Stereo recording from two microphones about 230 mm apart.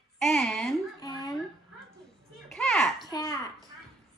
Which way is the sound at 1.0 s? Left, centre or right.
Centre.